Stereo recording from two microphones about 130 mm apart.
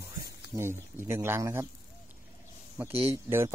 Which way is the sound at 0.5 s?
20° right (ahead or behind).